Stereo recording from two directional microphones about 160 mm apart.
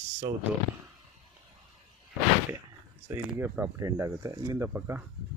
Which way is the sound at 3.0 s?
15° right (ahead or behind).